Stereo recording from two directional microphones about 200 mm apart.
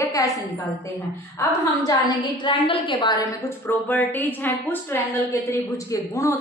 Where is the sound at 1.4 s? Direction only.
20° left (ahead or behind).